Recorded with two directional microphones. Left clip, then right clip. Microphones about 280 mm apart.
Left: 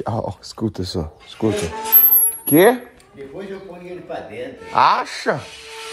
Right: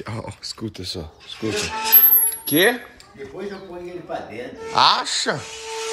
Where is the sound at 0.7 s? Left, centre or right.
Left.